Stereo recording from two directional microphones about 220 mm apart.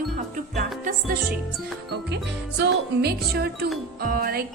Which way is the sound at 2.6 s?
45° right (ahead or behind).